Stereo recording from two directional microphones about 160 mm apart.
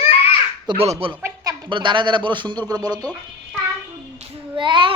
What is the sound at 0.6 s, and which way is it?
Child singing, 40° right (ahead or behind).